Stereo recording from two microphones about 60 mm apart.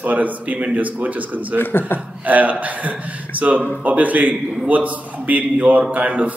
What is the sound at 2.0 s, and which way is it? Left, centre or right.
Speech, right.